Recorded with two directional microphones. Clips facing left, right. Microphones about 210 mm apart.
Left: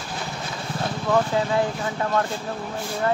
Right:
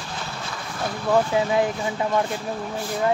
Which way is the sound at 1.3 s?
15° right (ahead or behind).